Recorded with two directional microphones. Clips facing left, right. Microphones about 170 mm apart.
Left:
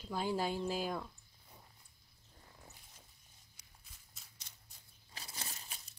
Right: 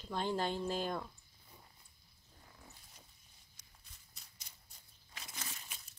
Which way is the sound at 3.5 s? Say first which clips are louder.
Even; 5° left (ahead or behind).